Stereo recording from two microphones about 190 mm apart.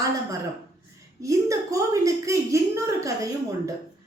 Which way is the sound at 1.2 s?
15° right (ahead or behind).